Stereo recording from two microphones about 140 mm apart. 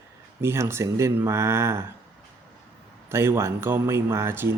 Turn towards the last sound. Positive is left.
turn(degrees=-15)  # may be behind; listen again after turning